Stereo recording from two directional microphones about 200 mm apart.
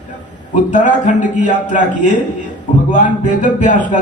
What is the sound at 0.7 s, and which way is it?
A man's voice, 40° left (ahead or behind).